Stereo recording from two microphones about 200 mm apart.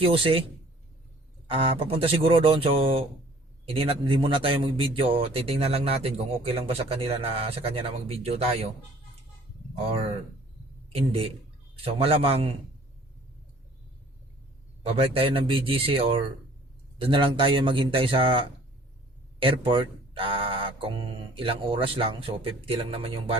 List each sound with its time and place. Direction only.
0.0 s a man's voice: 25° right (ahead or behind)
1.5 s a man's voice: 25° right (ahead or behind)
9.7 s a man's voice: 30° right (ahead or behind)
14.8 s a man's voice: 30° right (ahead or behind)